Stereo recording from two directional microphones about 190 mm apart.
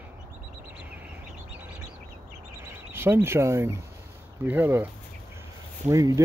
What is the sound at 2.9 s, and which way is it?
Speech, 15° right (ahead or behind).